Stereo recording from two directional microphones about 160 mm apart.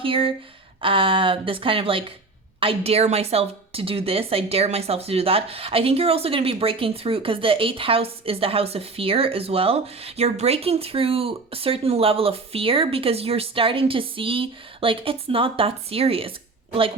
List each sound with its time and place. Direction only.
0.0 s a woman's voice: 35° right (ahead or behind)